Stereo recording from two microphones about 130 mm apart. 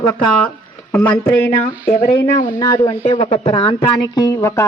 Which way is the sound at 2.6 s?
30° left (ahead or behind).